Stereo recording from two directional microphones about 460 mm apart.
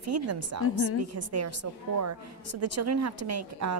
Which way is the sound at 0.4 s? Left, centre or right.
Right.